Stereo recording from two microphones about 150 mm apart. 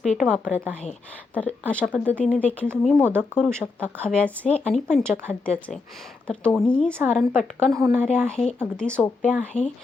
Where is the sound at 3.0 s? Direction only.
15° right (ahead or behind).